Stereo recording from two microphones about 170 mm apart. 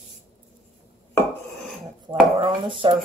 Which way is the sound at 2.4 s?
30° right (ahead or behind).